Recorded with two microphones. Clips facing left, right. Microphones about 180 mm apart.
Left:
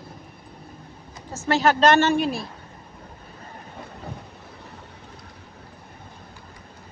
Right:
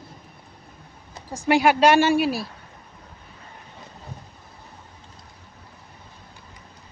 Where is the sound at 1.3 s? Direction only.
15° right (ahead or behind).